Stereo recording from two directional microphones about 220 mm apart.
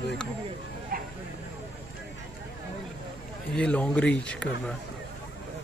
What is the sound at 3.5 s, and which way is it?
Speech, 5° left (ahead or behind).